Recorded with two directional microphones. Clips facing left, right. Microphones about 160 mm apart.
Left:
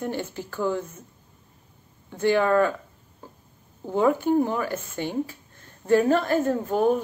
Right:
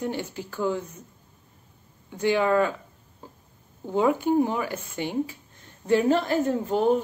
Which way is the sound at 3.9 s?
15° right (ahead or behind).